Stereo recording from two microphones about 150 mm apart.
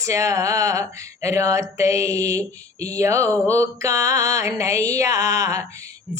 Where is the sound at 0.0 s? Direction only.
20° right (ahead or behind).